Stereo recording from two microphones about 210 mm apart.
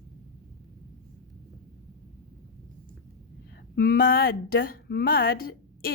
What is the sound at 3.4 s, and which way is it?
A woman's voice, 50° left (ahead or behind).